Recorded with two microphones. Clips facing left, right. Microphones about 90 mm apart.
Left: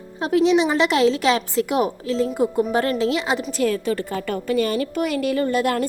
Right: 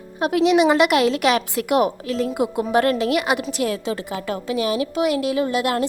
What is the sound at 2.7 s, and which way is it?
Speech, 60° right (ahead or behind).